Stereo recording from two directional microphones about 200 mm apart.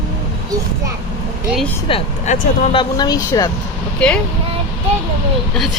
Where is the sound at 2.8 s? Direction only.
20° left (ahead or behind).